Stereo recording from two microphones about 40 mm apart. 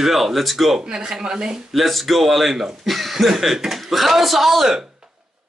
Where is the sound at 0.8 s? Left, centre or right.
Right.